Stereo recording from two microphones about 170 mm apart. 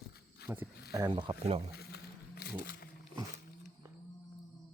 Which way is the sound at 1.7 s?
70° left (ahead or behind).